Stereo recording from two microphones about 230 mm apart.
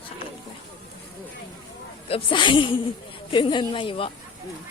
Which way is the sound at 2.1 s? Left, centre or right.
Left.